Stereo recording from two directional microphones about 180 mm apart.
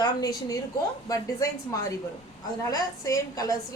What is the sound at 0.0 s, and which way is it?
A woman's voice, 20° left (ahead or behind).